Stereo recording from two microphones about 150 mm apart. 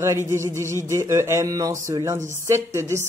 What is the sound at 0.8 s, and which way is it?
Speech, 20° right (ahead or behind).